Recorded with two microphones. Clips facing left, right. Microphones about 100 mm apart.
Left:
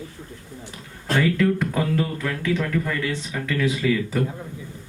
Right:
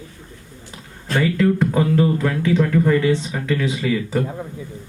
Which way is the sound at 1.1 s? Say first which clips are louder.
Right 3 dB; 25° right (ahead or behind).